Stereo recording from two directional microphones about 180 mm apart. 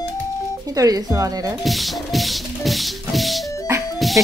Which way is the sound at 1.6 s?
Centre (ahead or behind).